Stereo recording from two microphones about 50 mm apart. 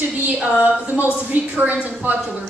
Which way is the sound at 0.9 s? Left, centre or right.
Right.